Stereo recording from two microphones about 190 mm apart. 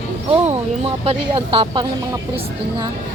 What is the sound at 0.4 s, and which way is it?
Speech, 30° right (ahead or behind).